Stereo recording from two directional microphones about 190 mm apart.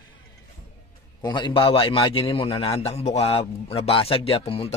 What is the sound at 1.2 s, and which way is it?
A man's voice, 25° left (ahead or behind).